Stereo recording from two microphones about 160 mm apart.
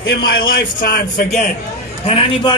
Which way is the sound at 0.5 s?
75° left (ahead or behind).